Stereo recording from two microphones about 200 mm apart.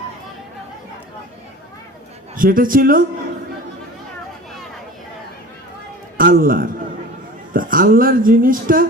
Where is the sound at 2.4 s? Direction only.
45° right (ahead or behind).